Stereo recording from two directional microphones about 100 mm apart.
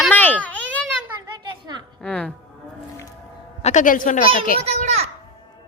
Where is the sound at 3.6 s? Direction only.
90° left.